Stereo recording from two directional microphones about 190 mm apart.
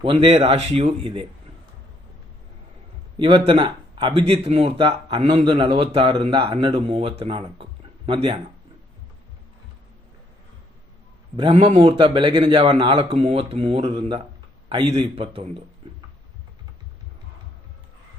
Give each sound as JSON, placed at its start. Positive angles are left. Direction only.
{"t": 0.0, "sound": "speech", "side_deg": -30}
{"t": 3.2, "sound": "speech", "side_deg": -25}
{"t": 11.3, "sound": "speech", "side_deg": -30}
{"t": 15.8, "sound": "a sound", "side_deg": -30}